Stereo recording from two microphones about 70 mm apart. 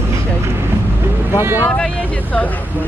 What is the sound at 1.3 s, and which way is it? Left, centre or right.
Speech, right.